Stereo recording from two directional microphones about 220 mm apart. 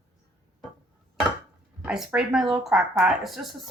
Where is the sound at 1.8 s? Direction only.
5° right (ahead or behind).